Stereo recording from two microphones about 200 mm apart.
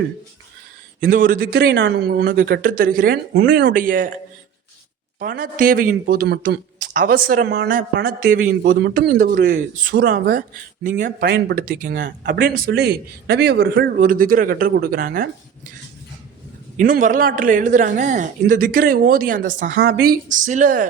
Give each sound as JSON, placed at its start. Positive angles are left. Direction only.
{"t": 1.1, "sound": "a man's voice", "side_deg": -45}
{"t": 3.7, "sound": "a man's voice", "side_deg": -45}
{"t": 5.2, "sound": "a man's voice", "side_deg": -45}
{"t": 16.7, "sound": "a man's voice", "side_deg": -40}